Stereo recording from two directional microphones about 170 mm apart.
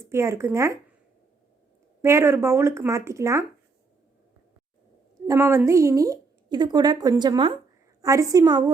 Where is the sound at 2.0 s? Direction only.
15° right (ahead or behind).